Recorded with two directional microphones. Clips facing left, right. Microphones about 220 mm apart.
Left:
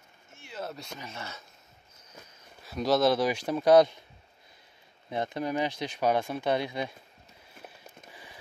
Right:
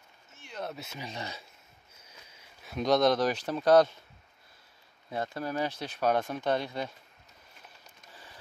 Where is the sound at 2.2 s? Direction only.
10° right (ahead or behind).